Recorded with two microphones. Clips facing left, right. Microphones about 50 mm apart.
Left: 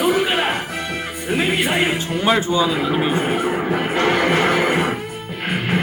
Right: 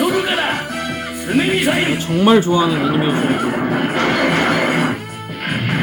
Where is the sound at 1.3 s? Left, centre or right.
Left.